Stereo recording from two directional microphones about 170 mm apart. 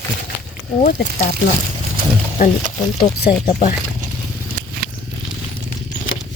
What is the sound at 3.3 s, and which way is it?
Speech, 30° left (ahead or behind).